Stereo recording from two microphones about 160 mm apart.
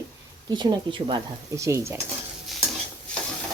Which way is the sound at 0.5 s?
30° right (ahead or behind).